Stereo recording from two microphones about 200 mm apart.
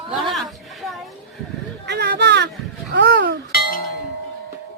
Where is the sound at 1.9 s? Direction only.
55° right (ahead or behind).